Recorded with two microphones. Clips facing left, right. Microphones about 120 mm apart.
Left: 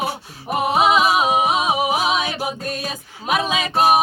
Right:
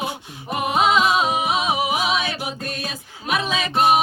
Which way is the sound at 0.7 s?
10° left (ahead or behind).